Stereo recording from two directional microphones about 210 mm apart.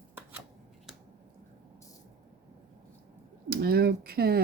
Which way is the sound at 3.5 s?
45° right (ahead or behind).